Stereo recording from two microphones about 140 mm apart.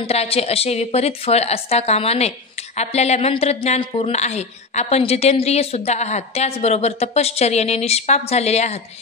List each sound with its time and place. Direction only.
0.0 s a woman's voice: 45° left (ahead or behind)